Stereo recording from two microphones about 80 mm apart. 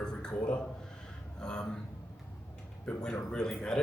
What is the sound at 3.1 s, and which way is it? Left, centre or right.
Speech, centre.